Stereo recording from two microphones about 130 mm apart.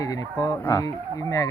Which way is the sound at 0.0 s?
25° left (ahead or behind).